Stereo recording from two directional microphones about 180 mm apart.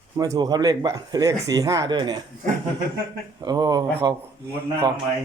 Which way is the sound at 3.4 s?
20° right (ahead or behind).